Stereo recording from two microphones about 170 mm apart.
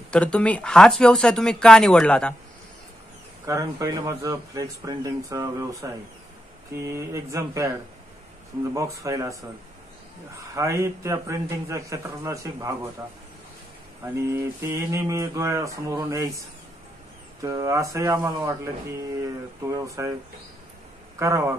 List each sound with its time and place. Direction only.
0.1 s speech: 5° left (ahead or behind)
3.4 s speech: 20° right (ahead or behind)
9.0 s speech: 20° right (ahead or behind)
10.5 s speech: 15° right (ahead or behind)
14.0 s speech: 15° right (ahead or behind)
21.2 s speech: 15° right (ahead or behind)